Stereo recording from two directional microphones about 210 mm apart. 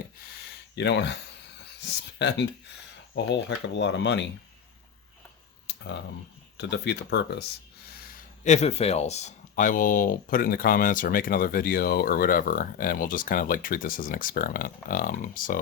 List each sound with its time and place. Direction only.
0.8 s speech: 55° left (ahead or behind)
3.8 s speech: 55° left (ahead or behind)
6.6 s speech: 55° left (ahead or behind)
8.4 s speech: 30° left (ahead or behind)